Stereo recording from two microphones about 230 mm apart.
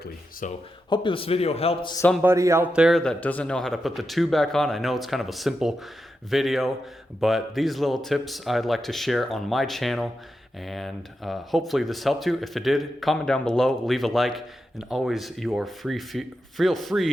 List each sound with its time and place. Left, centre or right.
0.0 s a sound: left
0.9 s a man's voice: left
2.0 s speech: centre
2.2 s speech: centre